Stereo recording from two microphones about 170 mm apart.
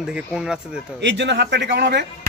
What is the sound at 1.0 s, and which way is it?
Speech, 90° right.